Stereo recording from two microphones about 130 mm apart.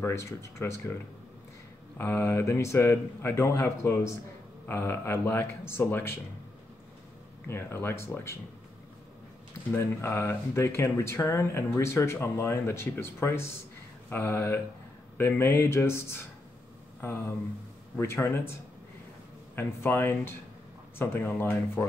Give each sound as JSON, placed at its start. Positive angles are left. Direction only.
{"t": 0.0, "sound": "speech", "side_deg": 20}
{"t": 2.0, "sound": "speech", "side_deg": 15}
{"t": 7.4, "sound": "speech", "side_deg": 20}
{"t": 9.8, "sound": "speech", "side_deg": 20}
{"t": 19.5, "sound": "speech", "side_deg": 15}